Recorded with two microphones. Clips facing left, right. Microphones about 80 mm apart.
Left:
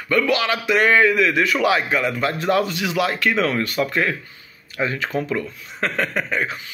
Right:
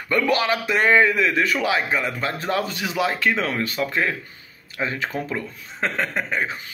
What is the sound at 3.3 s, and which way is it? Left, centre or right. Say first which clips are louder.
Speech: left 4 dB; centre.